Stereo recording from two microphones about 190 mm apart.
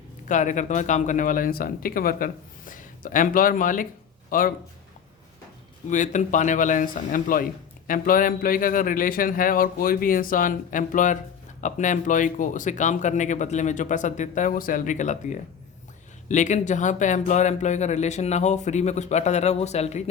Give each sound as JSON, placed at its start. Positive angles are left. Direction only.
{"t": 0.3, "sound": "speech", "side_deg": 40}
{"t": 5.9, "sound": "speech", "side_deg": 40}